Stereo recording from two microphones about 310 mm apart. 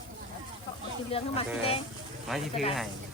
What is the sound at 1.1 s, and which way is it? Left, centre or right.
Speech, centre.